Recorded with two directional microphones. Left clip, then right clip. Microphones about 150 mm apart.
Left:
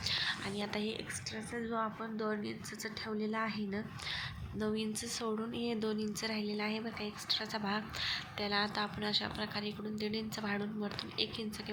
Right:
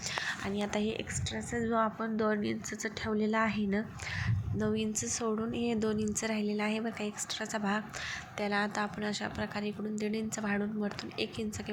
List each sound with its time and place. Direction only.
0.3 s a woman's voice: 15° right (ahead or behind)